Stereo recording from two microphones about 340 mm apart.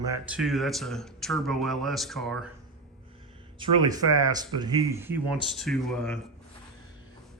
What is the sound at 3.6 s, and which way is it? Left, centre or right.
Speech, centre.